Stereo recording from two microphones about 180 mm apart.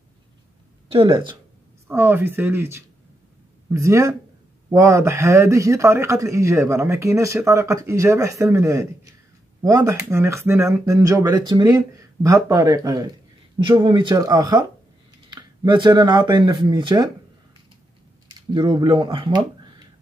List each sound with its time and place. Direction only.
0.9 s speech: 25° right (ahead or behind)
1.9 s speech: 10° right (ahead or behind)
18.5 s speech: 25° right (ahead or behind)